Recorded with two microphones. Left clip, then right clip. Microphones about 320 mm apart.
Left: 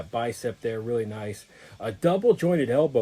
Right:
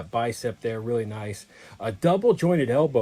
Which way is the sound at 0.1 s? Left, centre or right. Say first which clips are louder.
Right 3 dB; centre.